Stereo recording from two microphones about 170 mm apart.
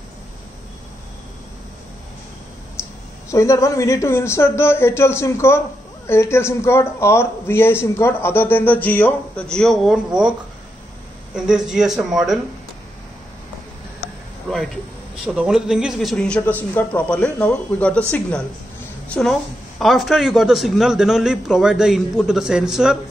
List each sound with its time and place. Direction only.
3.3 s a man's voice: 15° left (ahead or behind); by 10.3 s 5° right (ahead or behind)
11.3 s a man's voice: 5° right (ahead or behind)
15.2 s a man's voice: 5° right (ahead or behind)
19.0 s a woman's voice: 5° left (ahead or behind)